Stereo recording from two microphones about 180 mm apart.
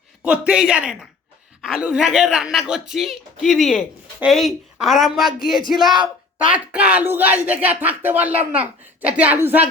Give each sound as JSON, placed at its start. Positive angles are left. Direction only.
{"t": 0.3, "sound": "speech", "side_deg": -5}
{"t": 5.9, "sound": "speech", "side_deg": -25}
{"t": 6.5, "sound": "speech", "side_deg": -5}